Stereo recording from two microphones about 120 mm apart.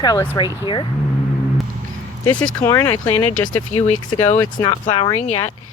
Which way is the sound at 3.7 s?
70° left (ahead or behind).